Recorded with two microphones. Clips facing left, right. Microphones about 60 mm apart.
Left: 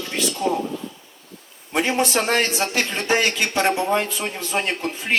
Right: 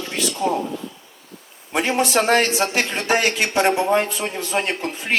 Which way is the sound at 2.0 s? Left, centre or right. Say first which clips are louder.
Right 3 dB; right.